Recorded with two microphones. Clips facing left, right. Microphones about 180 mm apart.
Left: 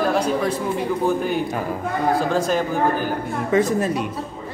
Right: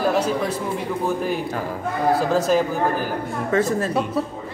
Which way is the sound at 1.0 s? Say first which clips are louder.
Left 1 dB; centre (ahead or behind).